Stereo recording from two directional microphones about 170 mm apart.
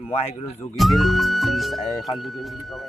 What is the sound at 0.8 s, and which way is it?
Speech, centre (ahead or behind).